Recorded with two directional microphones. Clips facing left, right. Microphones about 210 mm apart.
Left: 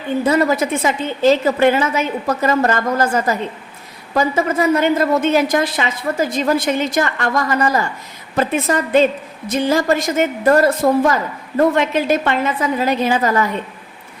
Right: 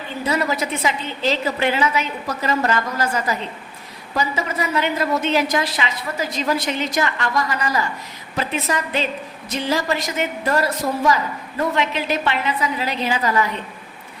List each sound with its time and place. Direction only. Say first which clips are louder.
0.3 s a woman's voice: left 5 dB; 50° left (ahead or behind)